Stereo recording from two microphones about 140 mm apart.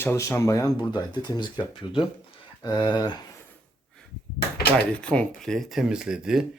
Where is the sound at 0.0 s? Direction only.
20° left (ahead or behind).